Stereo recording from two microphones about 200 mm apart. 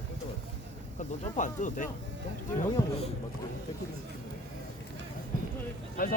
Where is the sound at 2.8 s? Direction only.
15° left (ahead or behind).